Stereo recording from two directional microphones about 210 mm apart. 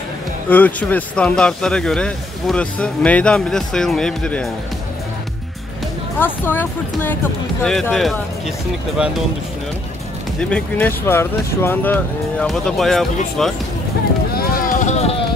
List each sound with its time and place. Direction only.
0.5 s speech: 10° left (ahead or behind)
6.1 s speech: 10° left (ahead or behind)
10.4 s speech: 5° left (ahead or behind)
14.3 s run: 45° left (ahead or behind)